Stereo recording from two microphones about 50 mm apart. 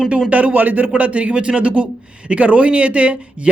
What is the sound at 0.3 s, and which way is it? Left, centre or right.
A man's voice, right.